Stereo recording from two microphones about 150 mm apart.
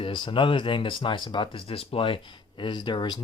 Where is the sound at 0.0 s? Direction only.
35° left (ahead or behind).